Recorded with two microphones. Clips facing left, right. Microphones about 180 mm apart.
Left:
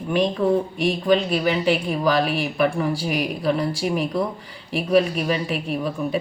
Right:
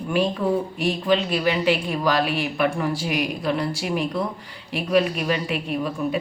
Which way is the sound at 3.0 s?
35° left (ahead or behind).